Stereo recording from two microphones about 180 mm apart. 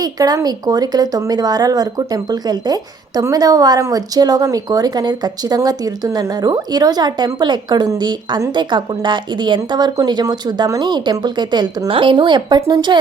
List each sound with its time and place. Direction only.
0.0 s a woman's voice: 20° right (ahead or behind)